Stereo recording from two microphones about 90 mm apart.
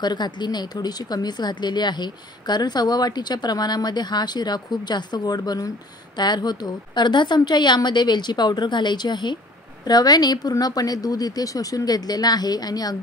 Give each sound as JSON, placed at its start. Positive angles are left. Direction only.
{"t": 0.0, "sound": "a woman's voice", "side_deg": 55}